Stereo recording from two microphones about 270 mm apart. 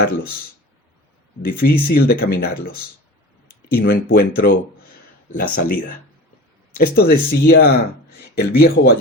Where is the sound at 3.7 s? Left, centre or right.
Left.